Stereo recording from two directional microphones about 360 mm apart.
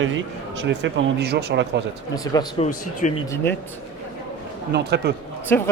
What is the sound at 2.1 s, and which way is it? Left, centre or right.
Speech, centre.